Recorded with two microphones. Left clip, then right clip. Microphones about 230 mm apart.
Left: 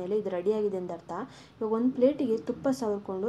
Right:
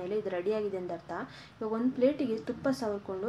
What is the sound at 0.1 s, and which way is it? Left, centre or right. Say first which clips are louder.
A woman's voice: left 3 dB; centre.